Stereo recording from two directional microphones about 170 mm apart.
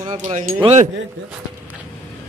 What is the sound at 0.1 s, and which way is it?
Speech, 45° right (ahead or behind).